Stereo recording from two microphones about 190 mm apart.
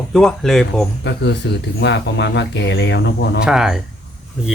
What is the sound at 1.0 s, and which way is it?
Speech, 65° left (ahead or behind).